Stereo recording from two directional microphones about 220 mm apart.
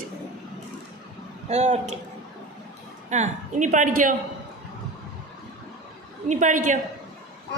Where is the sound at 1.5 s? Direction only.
30° right (ahead or behind).